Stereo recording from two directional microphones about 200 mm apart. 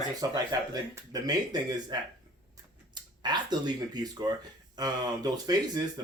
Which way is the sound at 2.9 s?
20° right (ahead or behind).